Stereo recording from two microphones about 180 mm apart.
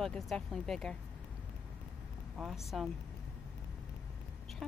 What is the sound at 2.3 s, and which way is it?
Speech, centre (ahead or behind).